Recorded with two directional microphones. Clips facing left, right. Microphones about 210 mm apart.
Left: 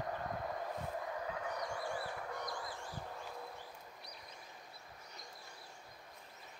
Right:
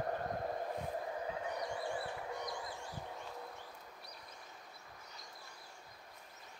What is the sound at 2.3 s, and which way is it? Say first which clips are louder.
Owl: right 1 dB; 15° right (ahead or behind).